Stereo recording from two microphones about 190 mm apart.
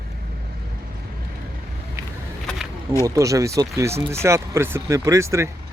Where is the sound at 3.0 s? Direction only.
15° right (ahead or behind).